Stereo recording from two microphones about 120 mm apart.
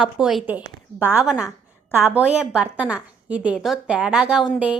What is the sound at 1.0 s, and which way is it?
Speech, 15° right (ahead or behind).